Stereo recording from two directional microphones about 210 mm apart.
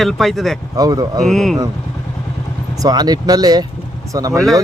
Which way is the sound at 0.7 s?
20° right (ahead or behind).